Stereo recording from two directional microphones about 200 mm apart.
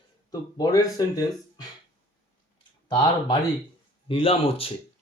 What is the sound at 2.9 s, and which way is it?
Speech, 20° left (ahead or behind).